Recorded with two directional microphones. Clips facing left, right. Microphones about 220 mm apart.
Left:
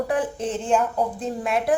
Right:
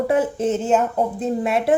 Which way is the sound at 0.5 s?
5° right (ahead or behind).